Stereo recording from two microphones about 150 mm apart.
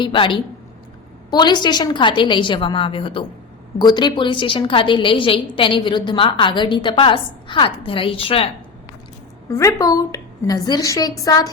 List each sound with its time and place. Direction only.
0.0 s a woman's voice: 35° left (ahead or behind)
9.5 s a woman's voice: 20° left (ahead or behind)